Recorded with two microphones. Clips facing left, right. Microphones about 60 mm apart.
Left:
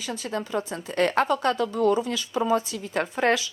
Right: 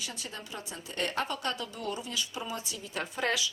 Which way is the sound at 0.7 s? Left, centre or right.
Left.